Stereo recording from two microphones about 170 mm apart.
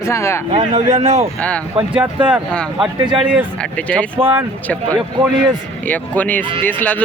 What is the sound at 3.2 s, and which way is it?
Speech, 5° right (ahead or behind).